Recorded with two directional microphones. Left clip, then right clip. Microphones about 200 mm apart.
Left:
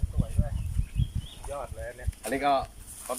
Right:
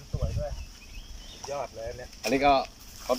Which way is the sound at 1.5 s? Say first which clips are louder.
Right 3 dB; 5° right (ahead or behind).